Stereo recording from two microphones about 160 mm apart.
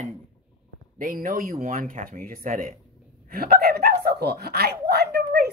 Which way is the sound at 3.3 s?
75° right (ahead or behind).